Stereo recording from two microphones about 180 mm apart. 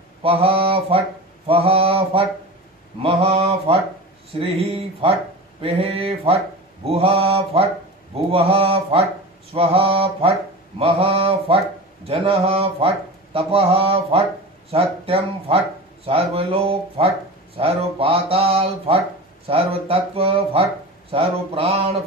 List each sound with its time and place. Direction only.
0.2 s speech: 30° right (ahead or behind)
1.5 s mantra: 35° right (ahead or behind)
4.4 s speech: 30° right (ahead or behind)